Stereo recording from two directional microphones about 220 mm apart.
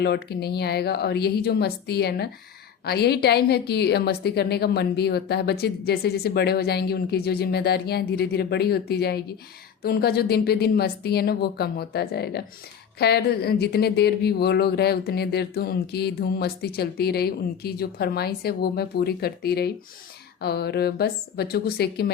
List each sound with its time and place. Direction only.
0.0 s speech: 50° left (ahead or behind)